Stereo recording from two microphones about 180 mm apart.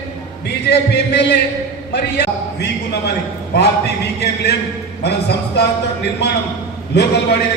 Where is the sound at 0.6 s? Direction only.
70° left (ahead or behind).